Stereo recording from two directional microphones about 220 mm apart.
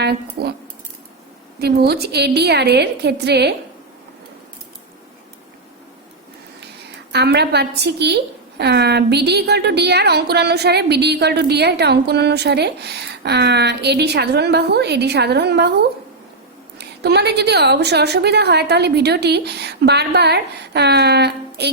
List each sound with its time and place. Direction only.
0.0 s a woman's voice: 45° right (ahead or behind)
1.6 s a woman's voice: 45° right (ahead or behind)
7.1 s a woman's voice: 50° right (ahead or behind)
16.7 s a woman's voice: 50° right (ahead or behind)